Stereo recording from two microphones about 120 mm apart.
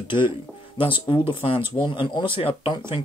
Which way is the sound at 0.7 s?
45° left (ahead or behind).